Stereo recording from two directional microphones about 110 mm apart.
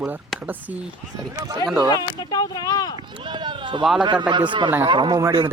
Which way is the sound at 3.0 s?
45° right (ahead or behind).